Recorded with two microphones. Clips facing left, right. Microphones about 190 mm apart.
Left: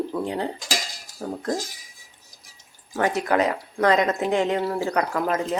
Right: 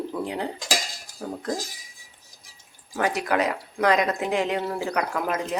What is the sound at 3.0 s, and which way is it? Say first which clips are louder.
Speech: left 2 dB; 5° right (ahead or behind).